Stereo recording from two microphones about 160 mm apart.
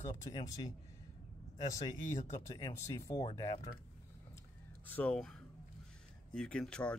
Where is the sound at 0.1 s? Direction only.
25° left (ahead or behind).